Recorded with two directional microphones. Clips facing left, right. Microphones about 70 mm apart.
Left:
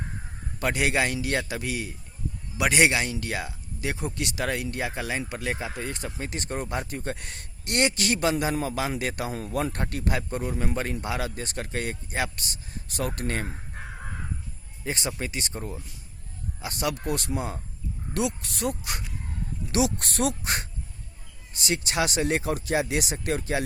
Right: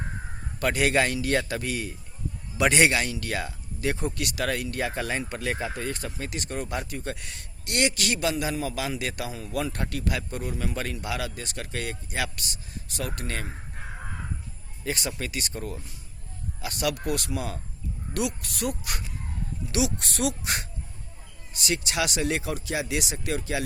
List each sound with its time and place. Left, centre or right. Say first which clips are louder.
0.6 s speech: right 2 dB; centre
4.1 s speech: even; left; by 5.7 s centre
5.7 s a man's voice: right 1 dB; left
14.8 s speech: even; left
19.7 s a man's voice: left 2 dB; left